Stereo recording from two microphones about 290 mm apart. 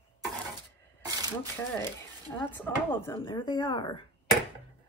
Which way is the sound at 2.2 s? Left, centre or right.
Centre.